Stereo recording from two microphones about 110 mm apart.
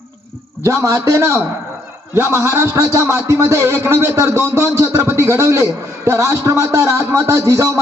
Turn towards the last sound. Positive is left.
turn(degrees=-25)  # may be behind; listen again after turning